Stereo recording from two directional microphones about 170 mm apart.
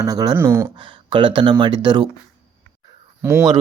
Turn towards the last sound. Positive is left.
turn(degrees=-15)  # may be behind; listen again after turning